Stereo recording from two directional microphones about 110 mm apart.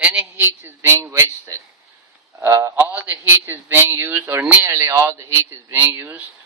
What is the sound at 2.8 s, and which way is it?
A man's voice, 15° right (ahead or behind).